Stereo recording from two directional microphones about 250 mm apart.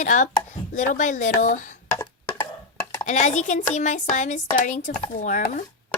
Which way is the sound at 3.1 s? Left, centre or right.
Left.